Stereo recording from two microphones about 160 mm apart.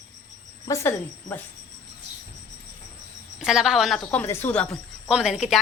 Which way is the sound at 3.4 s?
5° right (ahead or behind).